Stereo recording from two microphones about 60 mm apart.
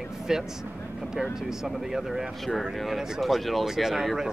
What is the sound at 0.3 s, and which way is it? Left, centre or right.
Speech, centre.